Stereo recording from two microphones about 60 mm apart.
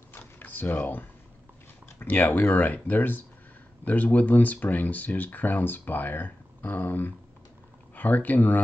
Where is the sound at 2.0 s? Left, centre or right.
Left.